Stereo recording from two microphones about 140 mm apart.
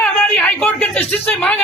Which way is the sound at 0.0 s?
10° left (ahead or behind).